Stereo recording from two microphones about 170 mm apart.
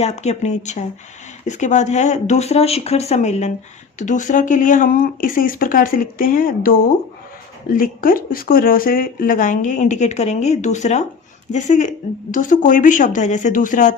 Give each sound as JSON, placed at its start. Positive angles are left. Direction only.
{"t": 0.0, "sound": "speech", "side_deg": 40}